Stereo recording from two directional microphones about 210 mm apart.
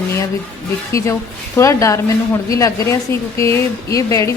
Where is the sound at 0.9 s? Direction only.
15° left (ahead or behind).